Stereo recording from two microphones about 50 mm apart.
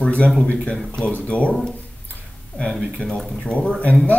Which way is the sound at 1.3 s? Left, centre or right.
Left.